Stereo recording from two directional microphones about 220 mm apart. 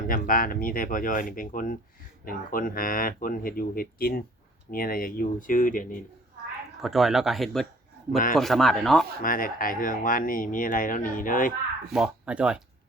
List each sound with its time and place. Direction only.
0.1 s speech: 40° left (ahead or behind)
6.8 s speech: centre (ahead or behind)
9.2 s speech: 40° left (ahead or behind)
11.9 s speech: centre (ahead or behind)